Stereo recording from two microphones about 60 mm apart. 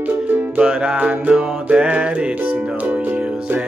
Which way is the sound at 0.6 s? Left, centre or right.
Centre.